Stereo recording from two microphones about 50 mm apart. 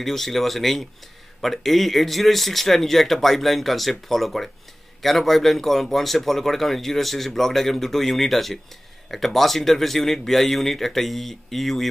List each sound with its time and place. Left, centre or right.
0.0 s a man's voice: centre